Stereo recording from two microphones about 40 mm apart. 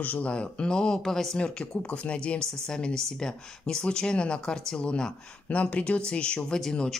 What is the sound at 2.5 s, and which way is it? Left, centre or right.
Speech, centre.